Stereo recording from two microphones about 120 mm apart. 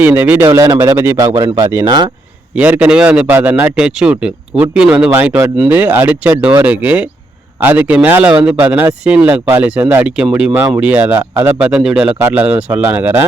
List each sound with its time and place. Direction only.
0.0 s speech: 15° right (ahead or behind)
1.3 s speech: 45° right (ahead or behind)
2.6 s speech: 10° right (ahead or behind)
3.7 s speech: 5° right (ahead or behind)
10.5 s speech: 20° right (ahead or behind)